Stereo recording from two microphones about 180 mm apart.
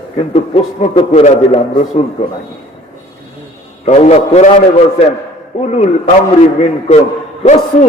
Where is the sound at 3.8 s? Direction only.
40° left (ahead or behind).